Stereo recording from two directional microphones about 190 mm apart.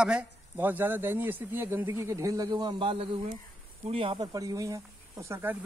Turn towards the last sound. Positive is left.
turn(degrees=-10)  # may be behind; listen again after turning